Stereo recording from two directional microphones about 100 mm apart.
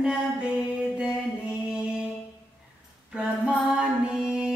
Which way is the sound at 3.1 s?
5° right (ahead or behind).